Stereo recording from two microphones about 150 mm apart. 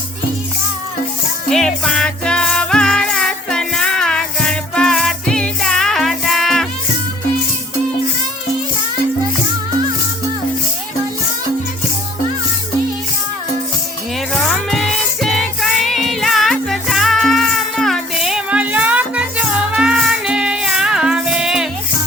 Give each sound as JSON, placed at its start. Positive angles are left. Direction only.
{"t": 1.5, "sound": "music", "side_deg": 5}
{"t": 14.3, "sound": "music", "side_deg": 5}